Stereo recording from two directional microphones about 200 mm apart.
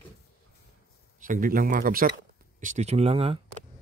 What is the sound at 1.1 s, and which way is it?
Speech, 40° right (ahead or behind).